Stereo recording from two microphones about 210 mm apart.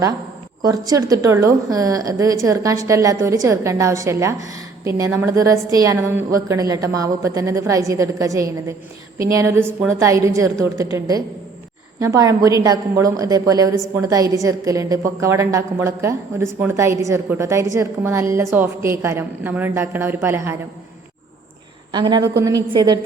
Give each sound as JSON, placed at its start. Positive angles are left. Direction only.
{"t": 0.6, "sound": "a woman's voice", "side_deg": -15}
{"t": 21.9, "sound": "a woman's voice", "side_deg": -20}